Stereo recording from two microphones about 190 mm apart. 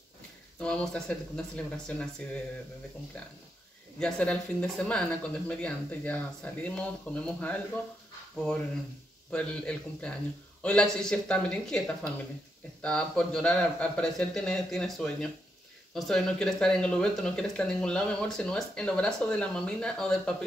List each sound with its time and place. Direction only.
0.6 s speech: 5° left (ahead or behind)
4.0 s speech: 5° left (ahead or behind)
9.3 s speech: 5° left (ahead or behind)
12.8 s speech: 5° left (ahead or behind)